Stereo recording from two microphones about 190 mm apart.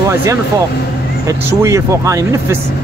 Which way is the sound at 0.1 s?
15° right (ahead or behind).